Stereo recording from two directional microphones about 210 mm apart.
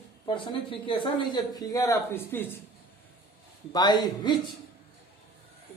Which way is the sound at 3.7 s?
20° left (ahead or behind).